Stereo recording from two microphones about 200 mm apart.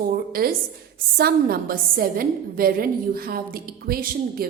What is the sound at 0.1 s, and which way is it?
A woman's voice, 50° right (ahead or behind).